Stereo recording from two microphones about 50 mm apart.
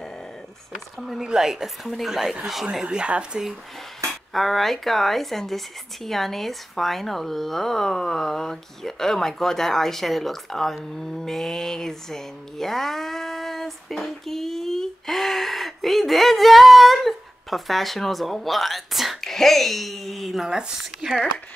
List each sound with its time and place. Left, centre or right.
0.9 s speech: centre
4.1 s speech: centre
20.4 s speech: centre